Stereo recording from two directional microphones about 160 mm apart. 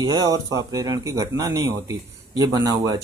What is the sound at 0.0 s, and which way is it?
Speech, 25° right (ahead or behind).